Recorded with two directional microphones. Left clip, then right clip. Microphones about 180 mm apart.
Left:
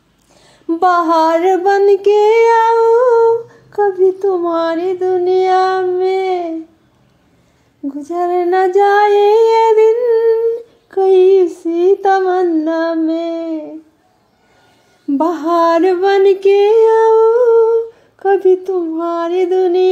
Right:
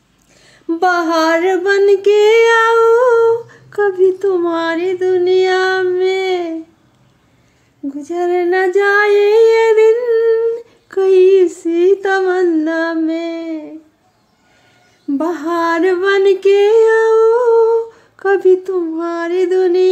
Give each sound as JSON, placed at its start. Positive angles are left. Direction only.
{"t": 0.4, "sound": "female singing", "side_deg": 5}
{"t": 2.3, "sound": "humming", "side_deg": -15}
{"t": 7.9, "sound": "female singing", "side_deg": 0}
{"t": 10.4, "sound": "a sound", "side_deg": -15}
{"t": 11.9, "sound": "humming", "side_deg": -15}
{"t": 13.5, "sound": "female singing", "side_deg": 0}
{"t": 15.0, "sound": "female singing", "side_deg": 10}
{"t": 18.2, "sound": "humming", "side_deg": -15}
{"t": 18.7, "sound": "female singing", "side_deg": -5}